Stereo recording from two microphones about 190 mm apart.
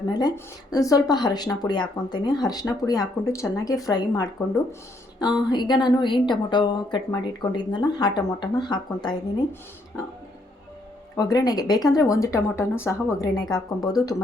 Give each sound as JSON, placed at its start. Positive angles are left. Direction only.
{"t": 0.1, "sound": "speech", "side_deg": 20}
{"t": 11.2, "sound": "speech", "side_deg": 20}